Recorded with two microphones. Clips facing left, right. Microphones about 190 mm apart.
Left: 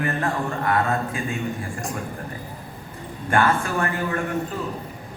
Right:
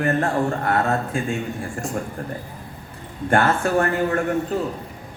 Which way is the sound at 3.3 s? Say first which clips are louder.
Right 3 dB; 45° right (ahead or behind).